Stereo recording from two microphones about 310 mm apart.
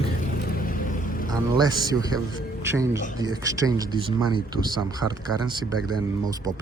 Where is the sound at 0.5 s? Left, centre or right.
Left.